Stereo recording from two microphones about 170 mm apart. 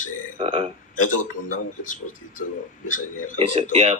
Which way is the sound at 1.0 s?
50° left (ahead or behind).